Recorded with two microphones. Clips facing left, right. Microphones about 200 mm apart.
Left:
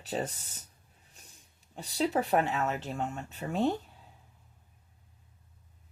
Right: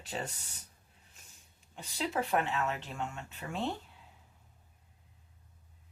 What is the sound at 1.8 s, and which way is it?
Speech, 35° left (ahead or behind).